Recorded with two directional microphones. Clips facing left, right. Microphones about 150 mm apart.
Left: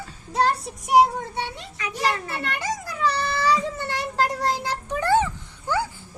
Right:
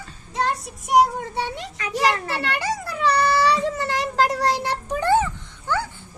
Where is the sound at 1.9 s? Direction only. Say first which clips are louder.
Right 4 dB; 90° right.